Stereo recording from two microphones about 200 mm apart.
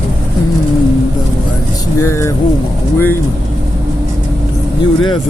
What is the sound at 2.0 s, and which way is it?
Speech, 15° left (ahead or behind).